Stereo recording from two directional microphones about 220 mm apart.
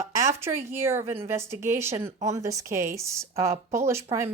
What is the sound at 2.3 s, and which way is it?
Speech, 15° right (ahead or behind).